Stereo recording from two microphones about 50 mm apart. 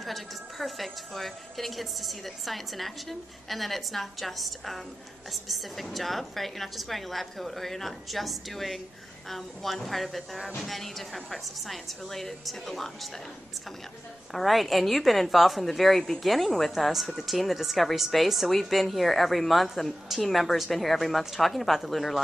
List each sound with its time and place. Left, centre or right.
0.0 s a woman's voice: centre
14.3 s a woman's voice: centre